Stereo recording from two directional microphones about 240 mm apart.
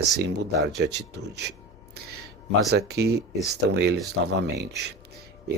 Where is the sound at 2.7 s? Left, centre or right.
Right.